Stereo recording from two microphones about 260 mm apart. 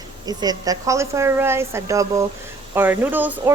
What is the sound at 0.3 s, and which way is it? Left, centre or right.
Speech, centre.